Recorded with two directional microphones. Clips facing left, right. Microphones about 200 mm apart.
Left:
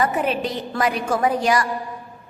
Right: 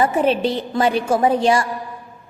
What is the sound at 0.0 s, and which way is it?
A woman's voice, 30° right (ahead or behind).